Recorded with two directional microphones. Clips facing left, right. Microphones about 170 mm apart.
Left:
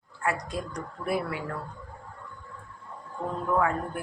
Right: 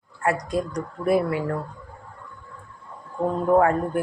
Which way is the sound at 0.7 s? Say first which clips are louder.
Right 8 dB; 40° right (ahead or behind).